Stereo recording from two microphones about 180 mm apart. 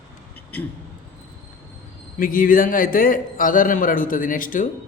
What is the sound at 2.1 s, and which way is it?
A man's voice, 50° left (ahead or behind).